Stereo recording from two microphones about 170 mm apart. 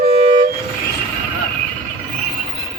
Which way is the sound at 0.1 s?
35° right (ahead or behind).